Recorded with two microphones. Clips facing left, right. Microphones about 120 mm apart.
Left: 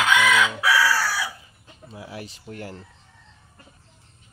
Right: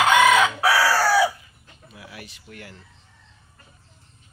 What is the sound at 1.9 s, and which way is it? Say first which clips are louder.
Speech: left 5 dB; 30° left (ahead or behind).